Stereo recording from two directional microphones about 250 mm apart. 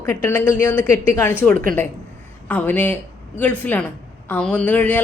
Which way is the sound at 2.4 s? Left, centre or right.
Centre.